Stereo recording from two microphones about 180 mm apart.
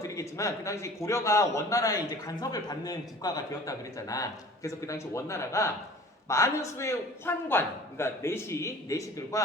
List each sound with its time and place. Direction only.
0.0 s a man's voice: 15° left (ahead or behind)